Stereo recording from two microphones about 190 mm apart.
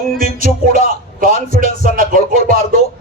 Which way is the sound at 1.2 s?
45° right (ahead or behind).